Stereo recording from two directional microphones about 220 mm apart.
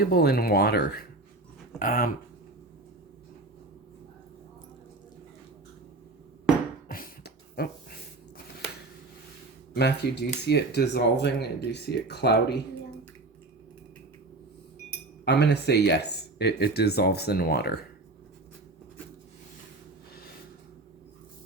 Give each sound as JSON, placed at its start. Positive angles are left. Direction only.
{"t": 0.0, "sound": "speech", "side_deg": 45}
{"t": 6.8, "sound": "beatboxing", "side_deg": 40}
{"t": 9.7, "sound": "speech", "side_deg": 50}
{"t": 15.2, "sound": "speech", "side_deg": 50}